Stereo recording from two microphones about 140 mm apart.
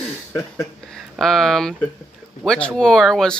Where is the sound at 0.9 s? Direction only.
Centre (ahead or behind).